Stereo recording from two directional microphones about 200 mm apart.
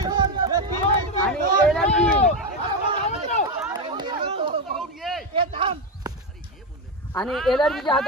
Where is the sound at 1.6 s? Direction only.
5° left (ahead or behind).